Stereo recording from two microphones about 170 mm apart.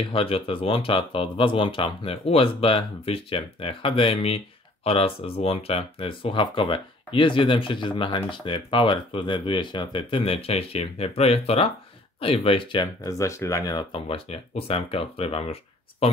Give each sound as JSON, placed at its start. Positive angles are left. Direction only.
{"t": 0.1, "sound": "speech", "side_deg": 30}
{"t": 13.2, "sound": "speech", "side_deg": 15}